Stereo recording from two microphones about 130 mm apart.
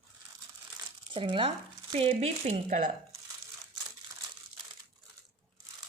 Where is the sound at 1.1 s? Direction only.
40° right (ahead or behind).